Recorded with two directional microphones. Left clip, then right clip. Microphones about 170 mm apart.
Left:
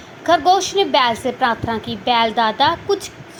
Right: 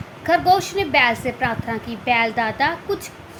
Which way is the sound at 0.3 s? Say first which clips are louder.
Left 2 dB; 15° left (ahead or behind).